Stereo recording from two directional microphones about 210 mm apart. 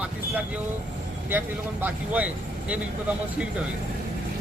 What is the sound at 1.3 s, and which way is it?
Speech, 10° right (ahead or behind).